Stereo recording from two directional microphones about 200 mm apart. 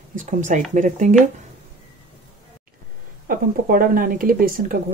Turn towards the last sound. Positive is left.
turn(degrees=-45)  # may be behind; listen again after turning